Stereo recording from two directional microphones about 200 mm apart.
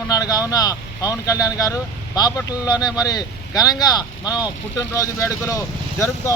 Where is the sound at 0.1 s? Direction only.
20° left (ahead or behind).